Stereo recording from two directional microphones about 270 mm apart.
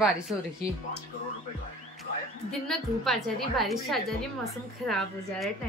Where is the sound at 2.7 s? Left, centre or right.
Centre.